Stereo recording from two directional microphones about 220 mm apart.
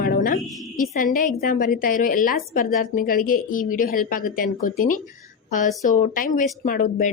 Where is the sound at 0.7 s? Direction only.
40° left (ahead or behind).